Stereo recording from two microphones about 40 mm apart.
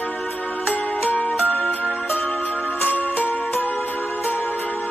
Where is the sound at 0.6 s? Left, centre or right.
Left.